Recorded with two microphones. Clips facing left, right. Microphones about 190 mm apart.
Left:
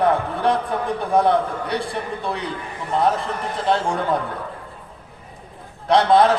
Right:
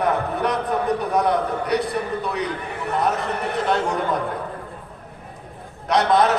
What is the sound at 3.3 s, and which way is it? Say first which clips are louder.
Speech: right 2 dB; 65° right (ahead or behind).